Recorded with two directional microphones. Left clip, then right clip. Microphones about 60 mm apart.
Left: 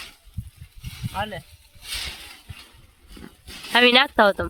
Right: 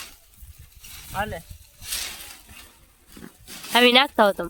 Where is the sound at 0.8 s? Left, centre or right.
Centre.